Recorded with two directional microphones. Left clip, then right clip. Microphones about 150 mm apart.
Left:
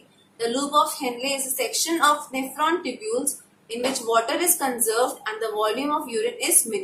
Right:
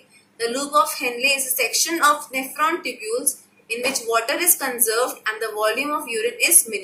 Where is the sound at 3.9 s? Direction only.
45° left (ahead or behind).